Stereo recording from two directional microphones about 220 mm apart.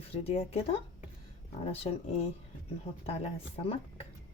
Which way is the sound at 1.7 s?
25° left (ahead or behind).